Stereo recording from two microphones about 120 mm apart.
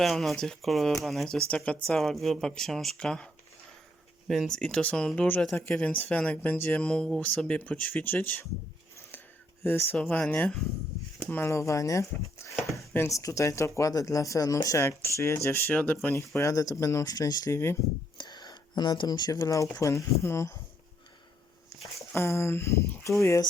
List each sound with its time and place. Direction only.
0.0 s speech: centre (ahead or behind)
4.3 s speech: 5° left (ahead or behind)
9.1 s a sound: 15° left (ahead or behind)
9.9 s speech: 15° left (ahead or behind)
16.4 s speech: 30° left (ahead or behind)
18.2 s speech: 35° left (ahead or behind)
21.9 s speech: 20° left (ahead or behind)